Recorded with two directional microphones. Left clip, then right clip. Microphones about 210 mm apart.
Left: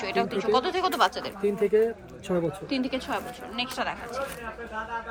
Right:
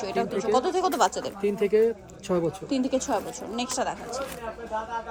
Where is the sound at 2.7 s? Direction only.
20° right (ahead or behind).